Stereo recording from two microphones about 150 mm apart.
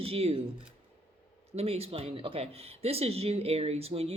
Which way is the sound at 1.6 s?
40° right (ahead or behind).